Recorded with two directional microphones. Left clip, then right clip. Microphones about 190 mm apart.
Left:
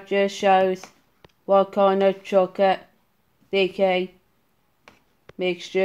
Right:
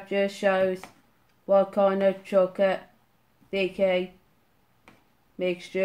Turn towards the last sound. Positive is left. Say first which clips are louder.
# left 3 dB
turn(degrees=30)  # may be behind; listen again after turning